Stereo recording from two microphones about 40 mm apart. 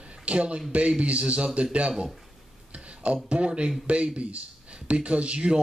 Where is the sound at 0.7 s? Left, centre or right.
Right.